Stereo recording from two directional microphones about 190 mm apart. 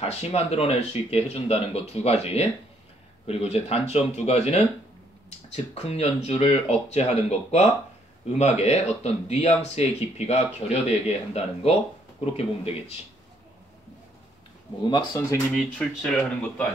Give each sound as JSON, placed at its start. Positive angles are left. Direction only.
{"t": 0.0, "sound": "speech", "side_deg": 30}
{"t": 14.9, "sound": "speech", "side_deg": 25}
{"t": 15.5, "sound": "speech", "side_deg": 0}